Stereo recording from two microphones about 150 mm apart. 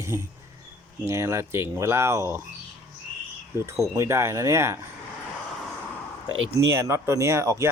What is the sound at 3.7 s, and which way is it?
Speech, 20° right (ahead or behind).